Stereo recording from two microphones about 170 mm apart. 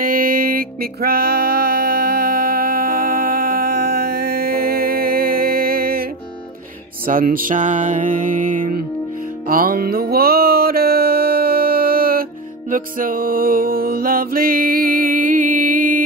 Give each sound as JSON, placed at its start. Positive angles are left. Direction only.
{"t": 0.0, "sound": "music", "side_deg": -55}
{"t": 7.1, "sound": "music", "side_deg": -55}